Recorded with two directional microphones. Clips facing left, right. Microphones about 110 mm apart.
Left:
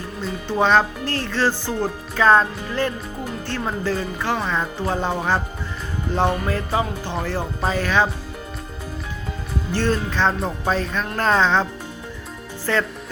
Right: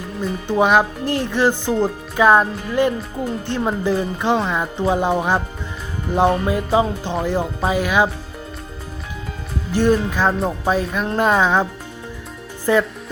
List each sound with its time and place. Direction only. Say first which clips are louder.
0.2 s speech: right 3 dB; 15° right (ahead or behind)
9.7 s speech: right 5 dB; 15° right (ahead or behind)